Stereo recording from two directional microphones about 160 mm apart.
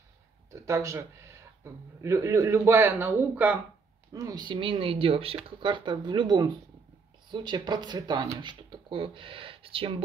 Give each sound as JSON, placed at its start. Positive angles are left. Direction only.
{"t": 0.5, "sound": "a man's voice", "side_deg": -20}
{"t": 4.1, "sound": "speech", "side_deg": -25}